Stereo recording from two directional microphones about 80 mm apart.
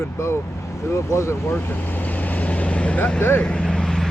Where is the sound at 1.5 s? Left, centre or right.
Left.